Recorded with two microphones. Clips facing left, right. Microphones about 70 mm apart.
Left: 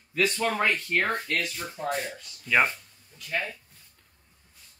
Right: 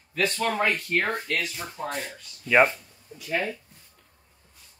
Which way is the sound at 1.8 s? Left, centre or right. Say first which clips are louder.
Left 3 dB; centre.